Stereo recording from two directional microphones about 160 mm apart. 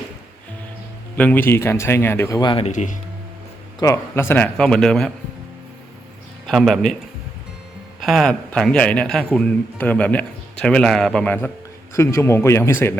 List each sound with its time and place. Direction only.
1.1 s a man's voice: 10° left (ahead or behind); by 2.7 s 35° left (ahead or behind)
2.7 s speech: 50° left (ahead or behind)
3.8 s a man's voice: 20° left (ahead or behind); by 5.1 s 5° left (ahead or behind)
6.5 s a man's voice: centre (ahead or behind)
8.0 s a man's voice: centre (ahead or behind)